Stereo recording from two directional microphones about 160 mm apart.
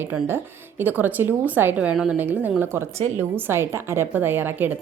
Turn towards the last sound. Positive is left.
turn(degrees=-10)  # may be behind; listen again after turning